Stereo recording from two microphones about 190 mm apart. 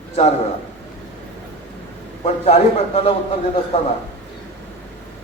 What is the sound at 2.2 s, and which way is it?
Speech, 30° left (ahead or behind).